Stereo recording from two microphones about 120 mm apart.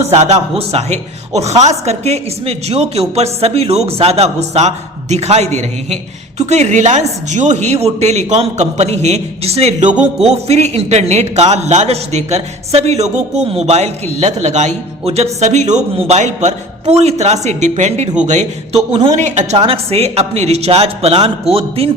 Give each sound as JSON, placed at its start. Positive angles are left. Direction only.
{"t": 0.0, "sound": "a man's voice", "side_deg": -65}
{"t": 9.9, "sound": "music", "side_deg": -5}
{"t": 10.4, "sound": "a man's voice", "side_deg": -65}
{"t": 19.5, "sound": "a man's voice", "side_deg": -50}